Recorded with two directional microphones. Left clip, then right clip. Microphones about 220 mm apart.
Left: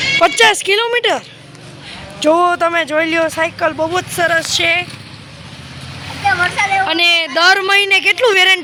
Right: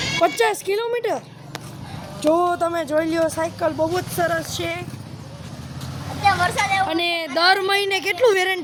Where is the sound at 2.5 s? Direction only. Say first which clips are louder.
Left 7 dB; 25° left (ahead or behind).